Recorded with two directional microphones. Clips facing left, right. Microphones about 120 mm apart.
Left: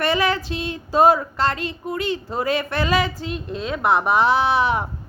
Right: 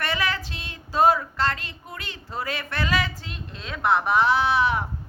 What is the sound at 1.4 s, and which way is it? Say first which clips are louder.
A woman's voice: left 4 dB; 20° left (ahead or behind).